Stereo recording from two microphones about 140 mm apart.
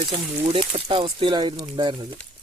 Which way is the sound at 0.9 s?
40° right (ahead or behind).